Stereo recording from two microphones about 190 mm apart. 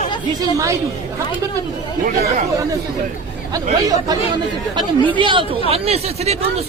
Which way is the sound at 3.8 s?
20° right (ahead or behind).